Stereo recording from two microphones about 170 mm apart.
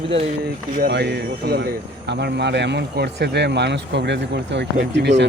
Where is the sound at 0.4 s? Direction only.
80° right.